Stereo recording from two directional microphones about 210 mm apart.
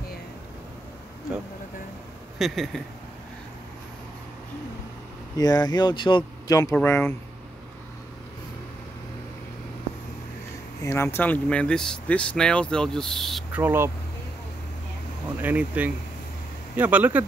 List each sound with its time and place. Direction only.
2.3 s speech: centre (ahead or behind)
5.4 s speech: 20° left (ahead or behind)
10.8 s speech: 15° left (ahead or behind)
13.6 s speech: 10° right (ahead or behind)
15.4 s speech: 5° right (ahead or behind)